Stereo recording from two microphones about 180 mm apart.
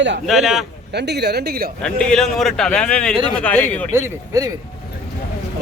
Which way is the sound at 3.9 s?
20° right (ahead or behind).